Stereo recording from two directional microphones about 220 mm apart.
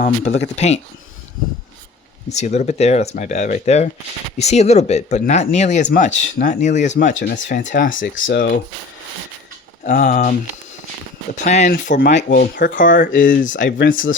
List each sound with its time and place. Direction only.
0.5 s speech: 30° left (ahead or behind)
2.3 s speech: 30° left (ahead or behind)
9.8 s speech: 35° left (ahead or behind)
11.3 s speech: 35° left (ahead or behind)